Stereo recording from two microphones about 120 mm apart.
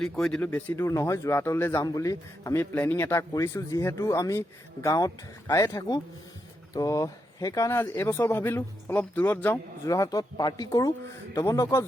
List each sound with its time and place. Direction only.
0.0 s speech: 5° left (ahead or behind)
0.8 s speech: 25° left (ahead or behind)
1.8 s speech: 30° left (ahead or behind)
9.8 s speech: 30° left (ahead or behind)